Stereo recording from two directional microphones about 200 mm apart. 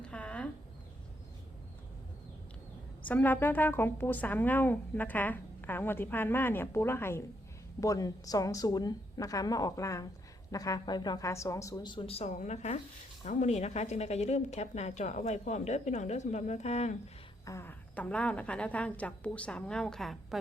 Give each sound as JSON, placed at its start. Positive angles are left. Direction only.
{"t": 0.0, "sound": "a sound", "side_deg": 5}
{"t": 3.1, "sound": "speech", "side_deg": 10}
{"t": 17.4, "sound": "speech", "side_deg": 15}